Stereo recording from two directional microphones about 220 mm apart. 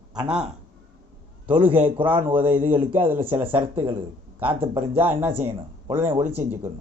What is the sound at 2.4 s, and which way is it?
Speech, 30° right (ahead or behind).